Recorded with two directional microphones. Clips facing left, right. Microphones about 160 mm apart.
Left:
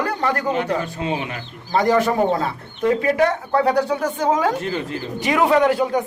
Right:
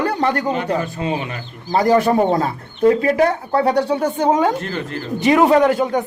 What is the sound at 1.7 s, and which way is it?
Speech, 35° right (ahead or behind).